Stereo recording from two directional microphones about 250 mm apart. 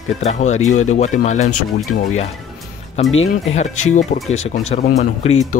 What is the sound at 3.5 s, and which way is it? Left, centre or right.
Speech, left.